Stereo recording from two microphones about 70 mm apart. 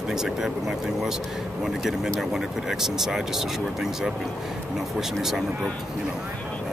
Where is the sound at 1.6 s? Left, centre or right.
Centre.